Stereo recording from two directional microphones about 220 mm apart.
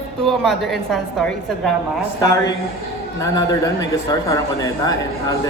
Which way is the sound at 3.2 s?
15° left (ahead or behind).